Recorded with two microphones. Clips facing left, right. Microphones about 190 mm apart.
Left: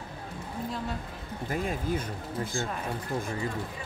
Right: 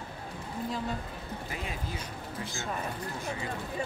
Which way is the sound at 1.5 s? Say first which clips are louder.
Left 11 dB; 50° left (ahead or behind).